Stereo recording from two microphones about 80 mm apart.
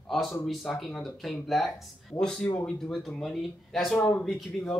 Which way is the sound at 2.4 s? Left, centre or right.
Left.